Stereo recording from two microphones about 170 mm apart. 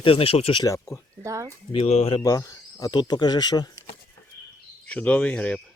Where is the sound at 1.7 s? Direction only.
35° left (ahead or behind).